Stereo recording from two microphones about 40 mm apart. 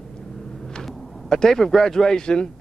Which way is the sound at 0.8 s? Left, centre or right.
Centre.